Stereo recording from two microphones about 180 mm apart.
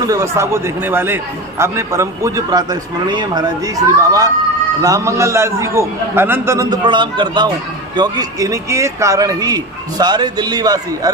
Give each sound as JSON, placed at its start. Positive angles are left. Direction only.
{"t": 0.0, "sound": "a man's voice", "side_deg": -20}